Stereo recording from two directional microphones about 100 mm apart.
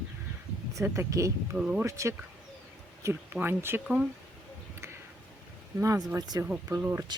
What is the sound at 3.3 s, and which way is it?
Speech, 20° right (ahead or behind).